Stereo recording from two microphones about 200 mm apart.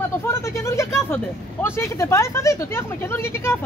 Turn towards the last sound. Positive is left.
turn(degrees=10)  # may be behind; listen again after turning